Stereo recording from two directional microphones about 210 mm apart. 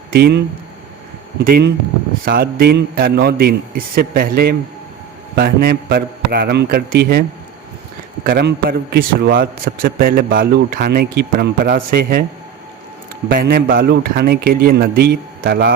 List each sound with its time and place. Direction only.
0.1 s a man's voice: 50° right (ahead or behind)
13.2 s a man's voice: 45° right (ahead or behind)